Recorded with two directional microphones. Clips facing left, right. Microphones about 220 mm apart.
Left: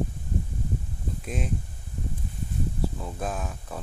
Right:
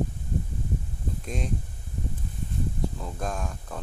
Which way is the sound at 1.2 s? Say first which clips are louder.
Left 1 dB; 5° left (ahead or behind).